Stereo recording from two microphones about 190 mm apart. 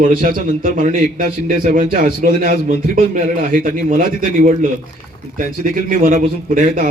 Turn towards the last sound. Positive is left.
turn(degrees=-45)  # may be behind; listen again after turning